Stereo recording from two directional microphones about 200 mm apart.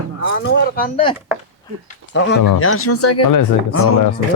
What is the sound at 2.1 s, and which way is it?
Speech, 75° left (ahead or behind).